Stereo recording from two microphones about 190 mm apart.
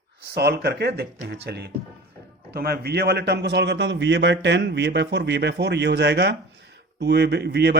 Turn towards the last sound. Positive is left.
turn(degrees=-60)  # may be behind; listen again after turning